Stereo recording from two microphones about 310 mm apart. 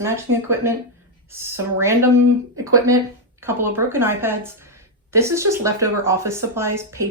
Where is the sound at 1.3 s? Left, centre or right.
Centre.